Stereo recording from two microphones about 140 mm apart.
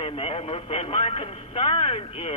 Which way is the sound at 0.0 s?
40° left (ahead or behind).